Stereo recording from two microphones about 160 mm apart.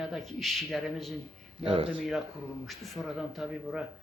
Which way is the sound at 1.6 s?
35° right (ahead or behind).